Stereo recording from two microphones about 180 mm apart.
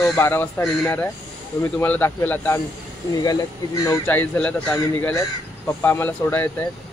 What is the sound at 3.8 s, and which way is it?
Speech, 10° left (ahead or behind).